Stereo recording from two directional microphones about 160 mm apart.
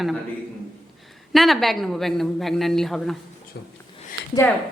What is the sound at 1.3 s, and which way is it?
A woman's voice, centre (ahead or behind).